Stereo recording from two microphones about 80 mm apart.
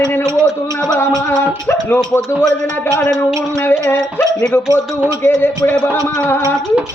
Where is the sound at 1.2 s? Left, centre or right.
Left.